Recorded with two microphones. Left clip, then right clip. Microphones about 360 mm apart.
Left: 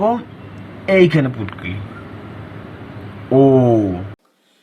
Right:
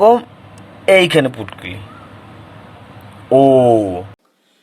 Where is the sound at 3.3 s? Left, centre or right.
Centre.